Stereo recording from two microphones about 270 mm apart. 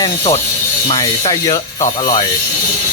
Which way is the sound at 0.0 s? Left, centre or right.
Centre.